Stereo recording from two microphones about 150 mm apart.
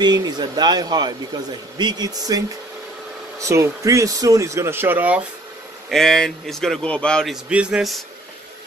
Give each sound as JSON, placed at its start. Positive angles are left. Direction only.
{"t": 0.0, "sound": "speech", "side_deg": -25}
{"t": 5.9, "sound": "a man's voice", "side_deg": 5}
{"t": 7.4, "sound": "speech", "side_deg": -5}